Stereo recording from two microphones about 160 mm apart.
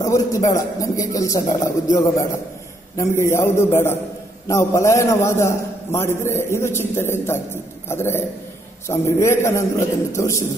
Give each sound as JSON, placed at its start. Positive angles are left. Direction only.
{"t": 0.0, "sound": "a man's voice", "side_deg": 20}
{"t": 3.0, "sound": "a man's voice", "side_deg": 15}